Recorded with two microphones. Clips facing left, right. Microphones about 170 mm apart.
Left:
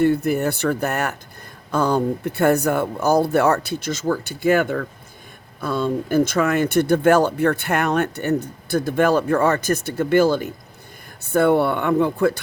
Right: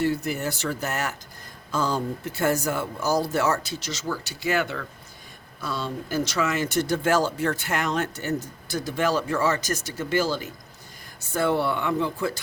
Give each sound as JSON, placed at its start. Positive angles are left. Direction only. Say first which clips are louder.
{"t": 0.0, "sound": "speech", "louder": "left 7 dB", "side_deg": 55}